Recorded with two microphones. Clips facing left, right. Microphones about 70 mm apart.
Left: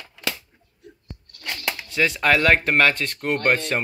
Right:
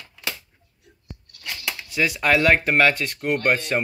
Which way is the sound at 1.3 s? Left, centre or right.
Left.